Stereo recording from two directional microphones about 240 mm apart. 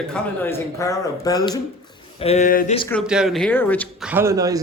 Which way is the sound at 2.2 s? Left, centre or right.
Left.